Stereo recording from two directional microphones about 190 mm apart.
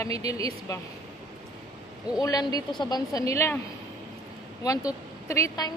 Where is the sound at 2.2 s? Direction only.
20° left (ahead or behind).